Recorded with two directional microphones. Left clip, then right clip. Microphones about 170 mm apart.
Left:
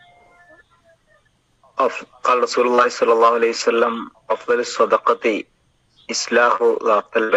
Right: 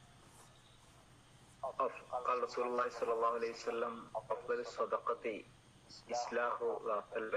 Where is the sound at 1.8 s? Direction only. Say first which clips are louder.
Left 19 dB; 60° left (ahead or behind).